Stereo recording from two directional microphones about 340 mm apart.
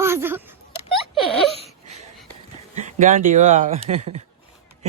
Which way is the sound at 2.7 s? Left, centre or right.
Right.